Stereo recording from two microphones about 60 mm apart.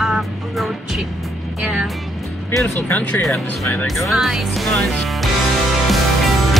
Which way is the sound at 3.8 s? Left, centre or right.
Centre.